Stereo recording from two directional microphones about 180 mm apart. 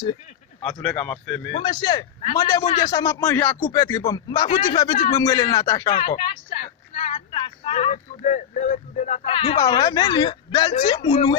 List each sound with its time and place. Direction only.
0.7 s speech: 5° left (ahead or behind)
1.6 s a woman's voice: 25° left (ahead or behind)